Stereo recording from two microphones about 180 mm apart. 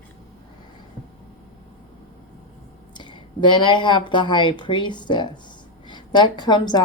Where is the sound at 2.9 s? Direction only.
25° left (ahead or behind).